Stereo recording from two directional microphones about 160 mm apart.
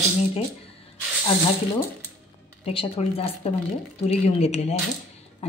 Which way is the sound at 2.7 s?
35° left (ahead or behind).